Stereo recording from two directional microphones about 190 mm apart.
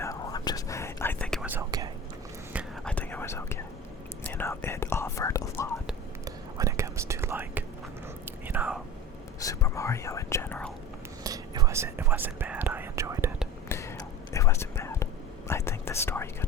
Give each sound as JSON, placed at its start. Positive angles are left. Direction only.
{"t": 0.0, "sound": "whispering", "side_deg": 15}
{"t": 1.5, "sound": "whispering", "side_deg": -15}
{"t": 2.8, "sound": "whispering", "side_deg": 10}
{"t": 6.2, "sound": "whispering", "side_deg": -15}
{"t": 9.4, "sound": "whispering", "side_deg": 15}
{"t": 11.2, "sound": "whispering", "side_deg": -20}
{"t": 13.7, "sound": "a sound", "side_deg": 15}
{"t": 14.3, "sound": "whispering", "side_deg": 15}